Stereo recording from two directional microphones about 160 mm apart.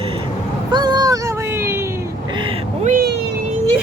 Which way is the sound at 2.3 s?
30° right (ahead or behind).